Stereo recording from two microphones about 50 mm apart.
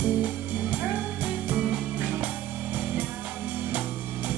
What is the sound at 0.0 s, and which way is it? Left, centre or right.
Music, right.